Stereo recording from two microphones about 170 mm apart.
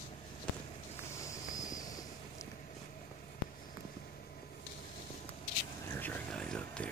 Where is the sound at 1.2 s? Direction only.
20° left (ahead or behind).